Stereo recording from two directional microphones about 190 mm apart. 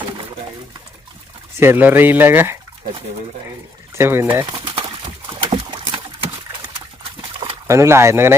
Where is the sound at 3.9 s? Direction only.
15° right (ahead or behind).